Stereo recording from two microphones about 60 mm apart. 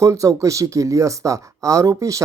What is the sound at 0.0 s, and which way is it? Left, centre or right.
Speech, right.